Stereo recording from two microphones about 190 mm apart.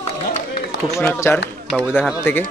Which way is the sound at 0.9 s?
10° left (ahead or behind).